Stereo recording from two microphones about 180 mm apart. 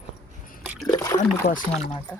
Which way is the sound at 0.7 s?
Centre (ahead or behind).